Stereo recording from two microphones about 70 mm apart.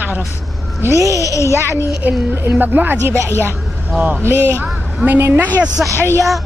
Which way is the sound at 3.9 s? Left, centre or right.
Right.